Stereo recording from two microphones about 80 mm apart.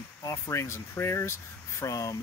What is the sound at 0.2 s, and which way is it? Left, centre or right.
Speech, left.